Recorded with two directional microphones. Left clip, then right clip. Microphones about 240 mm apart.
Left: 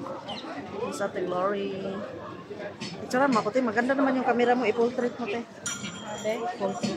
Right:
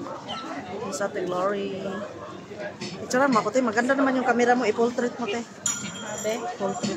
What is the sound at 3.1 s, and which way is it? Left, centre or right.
Speech, centre.